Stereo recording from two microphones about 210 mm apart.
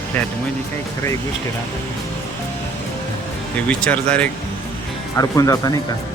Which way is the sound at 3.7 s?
5° left (ahead or behind).